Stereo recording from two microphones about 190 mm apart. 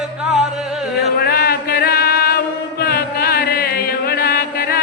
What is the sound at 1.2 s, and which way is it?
Music, 55° left (ahead or behind).